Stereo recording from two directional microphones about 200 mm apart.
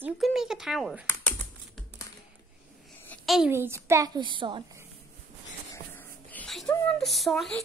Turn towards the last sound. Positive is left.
turn(degrees=0)  # may be behind; listen again after turning